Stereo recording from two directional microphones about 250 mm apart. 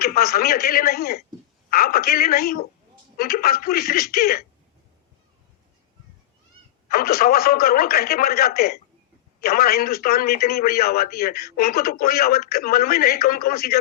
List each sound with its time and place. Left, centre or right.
0.0 s speech: left
6.8 s speech: left